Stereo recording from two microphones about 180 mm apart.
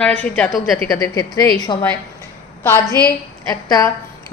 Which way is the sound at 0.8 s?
20° left (ahead or behind).